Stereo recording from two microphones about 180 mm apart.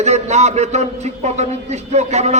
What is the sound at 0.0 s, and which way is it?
A man's voice, 40° right (ahead or behind).